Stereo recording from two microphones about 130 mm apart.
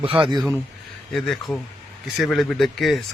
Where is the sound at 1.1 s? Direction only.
5° left (ahead or behind).